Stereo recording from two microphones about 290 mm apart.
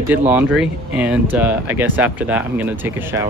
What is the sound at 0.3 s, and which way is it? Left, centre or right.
Speech, centre.